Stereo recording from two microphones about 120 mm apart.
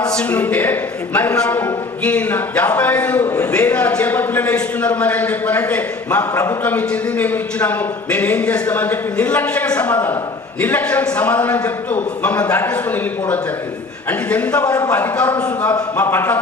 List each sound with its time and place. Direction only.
0.0 s speech: 10° left (ahead or behind)
6.3 s speech: 25° left (ahead or behind)
6.6 s speech: 15° left (ahead or behind)